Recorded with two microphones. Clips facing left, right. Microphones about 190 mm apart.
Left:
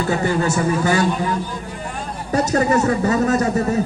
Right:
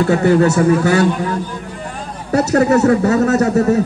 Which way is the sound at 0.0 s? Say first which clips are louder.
Right 7 dB; 65° right (ahead or behind).